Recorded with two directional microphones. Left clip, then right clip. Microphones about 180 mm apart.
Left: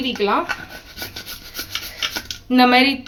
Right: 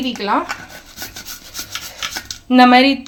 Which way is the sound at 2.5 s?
25° right (ahead or behind).